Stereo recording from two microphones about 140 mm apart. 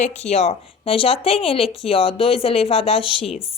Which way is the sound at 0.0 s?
50° left (ahead or behind).